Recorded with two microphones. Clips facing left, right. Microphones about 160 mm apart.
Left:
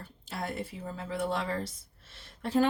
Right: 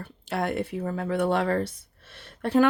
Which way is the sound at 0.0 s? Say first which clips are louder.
Right 9 dB; 70° right (ahead or behind).